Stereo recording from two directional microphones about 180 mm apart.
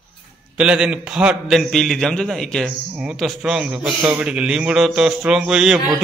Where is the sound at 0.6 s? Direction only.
5° right (ahead or behind).